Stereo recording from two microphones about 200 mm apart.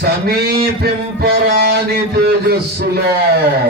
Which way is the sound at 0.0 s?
55° right (ahead or behind).